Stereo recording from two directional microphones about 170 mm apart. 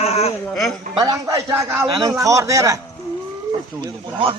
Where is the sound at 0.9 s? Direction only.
20° right (ahead or behind).